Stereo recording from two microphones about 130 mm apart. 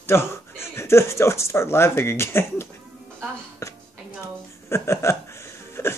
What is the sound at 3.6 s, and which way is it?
Music, 25° left (ahead or behind).